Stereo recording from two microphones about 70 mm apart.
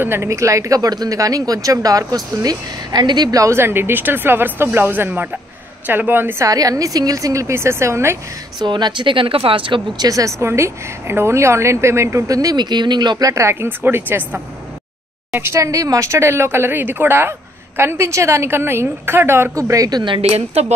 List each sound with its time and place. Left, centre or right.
0.0 s speech: right
0.3 s speech: right
3.3 s a woman's voice: right
6.4 s a woman's voice: right
8.5 s speech: right
9.9 s speech: right
10.4 s a woman's voice: right
13.3 s a woman's voice: right
15.6 s a woman's voice: right
19.5 s speech: right